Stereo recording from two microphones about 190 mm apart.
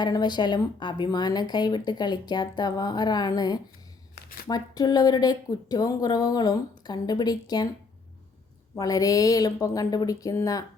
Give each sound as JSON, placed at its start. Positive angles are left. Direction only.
{"t": 0.0, "sound": "speech", "side_deg": 20}
{"t": 8.8, "sound": "speech", "side_deg": 20}